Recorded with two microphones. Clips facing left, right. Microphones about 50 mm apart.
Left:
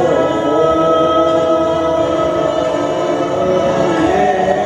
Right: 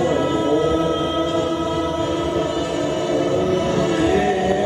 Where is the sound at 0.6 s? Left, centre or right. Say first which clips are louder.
Left 8 dB; left.